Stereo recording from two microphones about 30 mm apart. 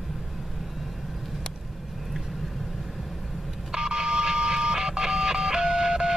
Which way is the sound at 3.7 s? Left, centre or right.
Right.